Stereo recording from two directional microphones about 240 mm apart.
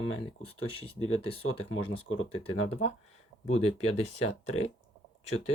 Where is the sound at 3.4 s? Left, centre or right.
Left.